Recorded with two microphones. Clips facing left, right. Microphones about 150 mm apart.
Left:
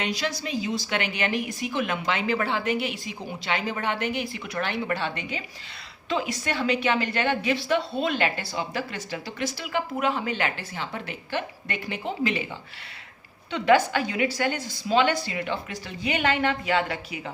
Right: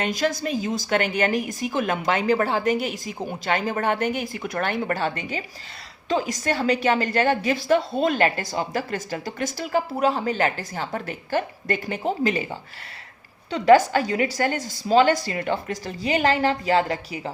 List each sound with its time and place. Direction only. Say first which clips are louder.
0.0 s a woman's voice: right 5 dB; 45° right (ahead or behind)